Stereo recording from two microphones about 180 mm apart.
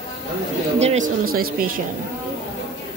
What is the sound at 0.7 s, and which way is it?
Speech, 40° right (ahead or behind).